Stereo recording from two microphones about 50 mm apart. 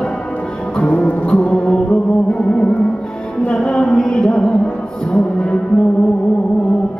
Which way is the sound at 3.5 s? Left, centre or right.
Centre.